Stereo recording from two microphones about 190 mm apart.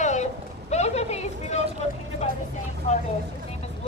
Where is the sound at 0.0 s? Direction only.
40° left (ahead or behind).